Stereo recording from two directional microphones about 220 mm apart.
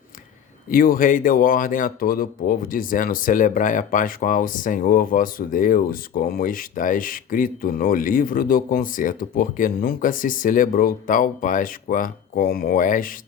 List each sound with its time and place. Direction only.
0.7 s speech: 40° left (ahead or behind)